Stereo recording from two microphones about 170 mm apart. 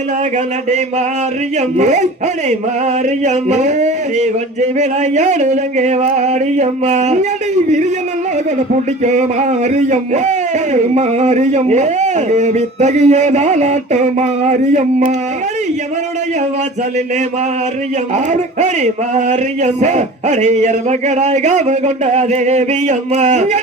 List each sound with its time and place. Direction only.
1.8 s speech: 45° right (ahead or behind)
3.2 s speech: 45° right (ahead or behind)
8.7 s speech: 45° right (ahead or behind)
18.6 s speech: 45° right (ahead or behind)